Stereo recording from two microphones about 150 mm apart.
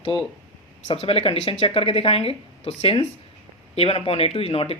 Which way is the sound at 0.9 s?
40° left (ahead or behind).